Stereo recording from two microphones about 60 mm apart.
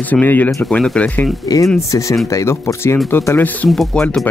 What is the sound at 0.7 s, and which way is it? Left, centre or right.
Speech, centre.